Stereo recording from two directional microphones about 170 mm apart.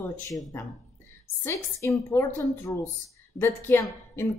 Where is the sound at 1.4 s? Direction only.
15° left (ahead or behind).